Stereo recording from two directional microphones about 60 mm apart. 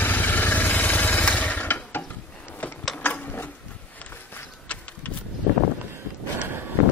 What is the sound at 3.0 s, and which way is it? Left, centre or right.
Sewing machine, left.